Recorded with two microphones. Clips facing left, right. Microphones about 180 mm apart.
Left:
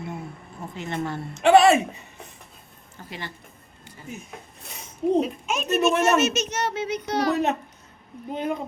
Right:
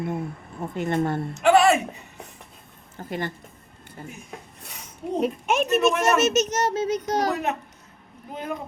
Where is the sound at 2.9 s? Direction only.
50° right (ahead or behind).